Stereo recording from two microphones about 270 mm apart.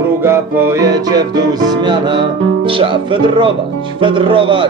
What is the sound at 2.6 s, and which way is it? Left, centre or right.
Speech, centre.